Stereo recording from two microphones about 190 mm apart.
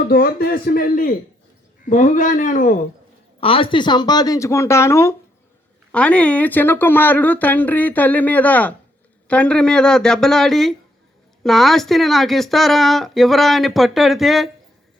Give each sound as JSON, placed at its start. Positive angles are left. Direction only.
{"t": 0.1, "sound": "speech", "side_deg": 50}
{"t": 3.4, "sound": "speech", "side_deg": 30}